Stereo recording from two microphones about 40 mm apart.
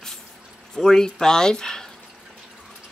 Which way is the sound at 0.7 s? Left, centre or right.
Centre.